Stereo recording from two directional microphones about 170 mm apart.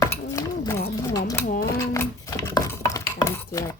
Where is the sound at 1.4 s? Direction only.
60° left (ahead or behind).